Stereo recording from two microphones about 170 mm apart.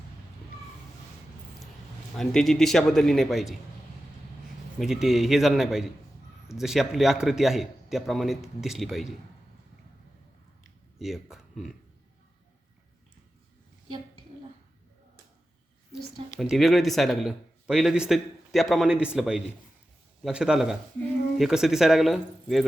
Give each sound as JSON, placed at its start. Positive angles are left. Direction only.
{"t": 2.1, "sound": "speech", "side_deg": 0}
{"t": 4.8, "sound": "speech", "side_deg": 0}
{"t": 10.9, "sound": "speech", "side_deg": 0}
{"t": 16.4, "sound": "speech", "side_deg": 0}